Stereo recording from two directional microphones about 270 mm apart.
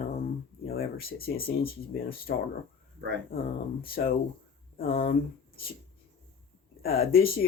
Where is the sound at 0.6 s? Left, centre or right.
Left.